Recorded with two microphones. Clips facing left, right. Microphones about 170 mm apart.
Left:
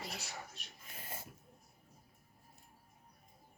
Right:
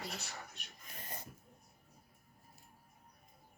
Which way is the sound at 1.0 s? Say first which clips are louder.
Even; 5° left (ahead or behind).